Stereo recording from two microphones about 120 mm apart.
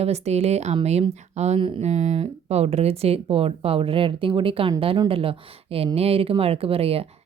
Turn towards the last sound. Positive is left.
turn(degrees=-55)  # may be behind; listen again after turning